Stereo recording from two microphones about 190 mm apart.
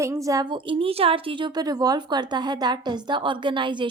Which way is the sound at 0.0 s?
15° right (ahead or behind).